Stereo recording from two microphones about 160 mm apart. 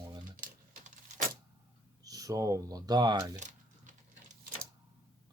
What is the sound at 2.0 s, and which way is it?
Speech, 20° right (ahead or behind).